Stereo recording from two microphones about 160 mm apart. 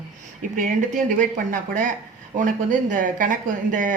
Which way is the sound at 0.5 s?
55° right (ahead or behind).